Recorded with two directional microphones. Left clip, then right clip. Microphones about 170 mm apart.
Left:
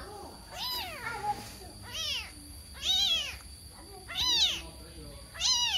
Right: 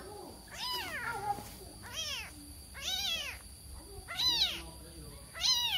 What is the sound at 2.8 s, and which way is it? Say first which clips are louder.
Cat: left 8 dB; 5° right (ahead or behind).